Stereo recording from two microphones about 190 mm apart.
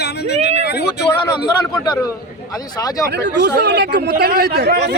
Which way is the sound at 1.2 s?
20° left (ahead or behind).